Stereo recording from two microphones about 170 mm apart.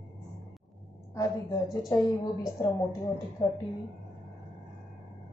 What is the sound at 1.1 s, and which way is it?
A woman's voice, 25° left (ahead or behind).